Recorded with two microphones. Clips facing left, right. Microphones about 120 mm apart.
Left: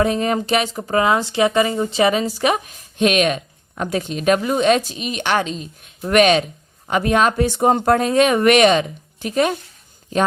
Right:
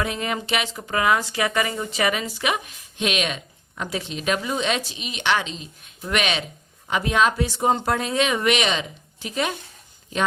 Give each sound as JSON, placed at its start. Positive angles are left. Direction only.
{"t": 0.0, "sound": "speech", "side_deg": 35}